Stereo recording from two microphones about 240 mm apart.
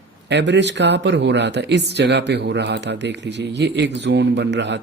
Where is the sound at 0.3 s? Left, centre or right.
Right.